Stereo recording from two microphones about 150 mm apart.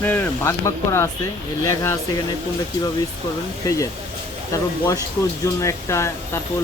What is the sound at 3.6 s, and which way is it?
Speech, 25° left (ahead or behind).